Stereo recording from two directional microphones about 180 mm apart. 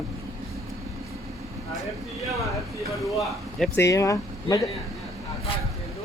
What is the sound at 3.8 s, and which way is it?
Speech, 15° left (ahead or behind).